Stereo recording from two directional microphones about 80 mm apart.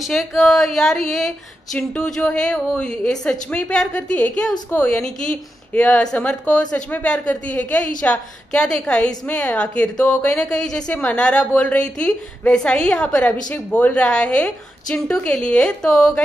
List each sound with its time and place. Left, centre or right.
0.1 s a woman's voice: centre